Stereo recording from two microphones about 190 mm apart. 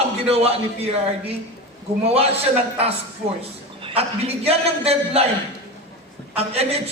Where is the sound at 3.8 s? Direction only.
30° right (ahead or behind).